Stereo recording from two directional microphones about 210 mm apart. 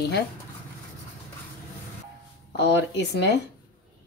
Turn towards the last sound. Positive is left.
turn(degrees=55)  # may be behind; listen again after turning